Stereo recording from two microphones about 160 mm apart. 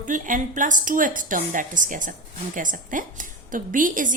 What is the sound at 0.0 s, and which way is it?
A woman's voice, 55° right (ahead or behind).